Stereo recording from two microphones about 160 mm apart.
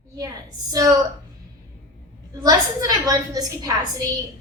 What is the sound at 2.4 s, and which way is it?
A woman's voice, 25° right (ahead or behind).